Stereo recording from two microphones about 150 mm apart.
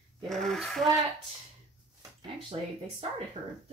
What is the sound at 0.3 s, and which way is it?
Speech, centre (ahead or behind).